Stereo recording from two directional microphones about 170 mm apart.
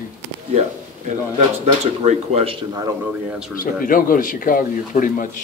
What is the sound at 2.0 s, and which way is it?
Speech, 35° right (ahead or behind).